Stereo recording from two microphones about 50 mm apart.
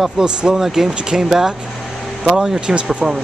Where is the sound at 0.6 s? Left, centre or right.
Centre.